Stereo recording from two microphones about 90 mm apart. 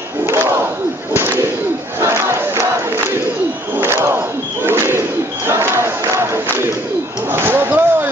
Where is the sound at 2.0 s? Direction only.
30° right (ahead or behind).